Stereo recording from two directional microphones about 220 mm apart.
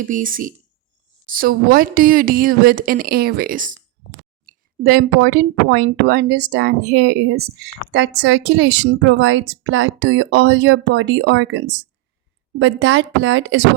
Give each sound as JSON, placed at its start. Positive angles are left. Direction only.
{"t": 0.0, "sound": "a woman's voice", "side_deg": -35}